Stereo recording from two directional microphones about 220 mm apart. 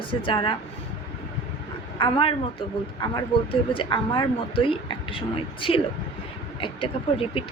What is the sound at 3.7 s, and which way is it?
Speech, 20° left (ahead or behind).